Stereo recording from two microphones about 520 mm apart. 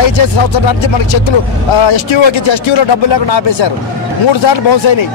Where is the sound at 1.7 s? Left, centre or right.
Left.